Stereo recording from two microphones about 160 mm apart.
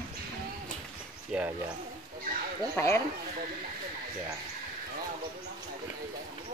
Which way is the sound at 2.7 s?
15° left (ahead or behind).